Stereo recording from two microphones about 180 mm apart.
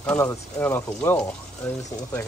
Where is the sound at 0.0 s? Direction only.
10° left (ahead or behind).